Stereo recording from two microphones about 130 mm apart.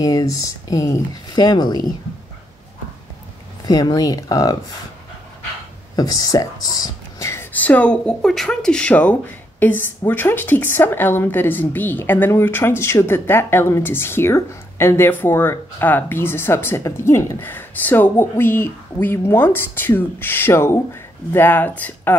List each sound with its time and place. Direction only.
0.0 s speech: 25° left (ahead or behind)
3.6 s speech: 30° left (ahead or behind)
5.9 s speech: 30° left (ahead or behind)
7.5 s speech: 10° left (ahead or behind)